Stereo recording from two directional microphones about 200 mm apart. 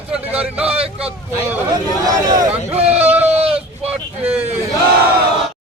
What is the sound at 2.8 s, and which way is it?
Speech, 30° right (ahead or behind).